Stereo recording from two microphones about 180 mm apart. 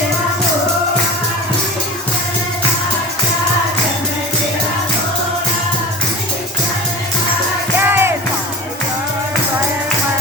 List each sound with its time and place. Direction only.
7.9 s music: 10° right (ahead or behind)